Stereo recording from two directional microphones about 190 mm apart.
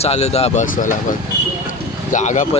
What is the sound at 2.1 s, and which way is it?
Speech, 40° left (ahead or behind).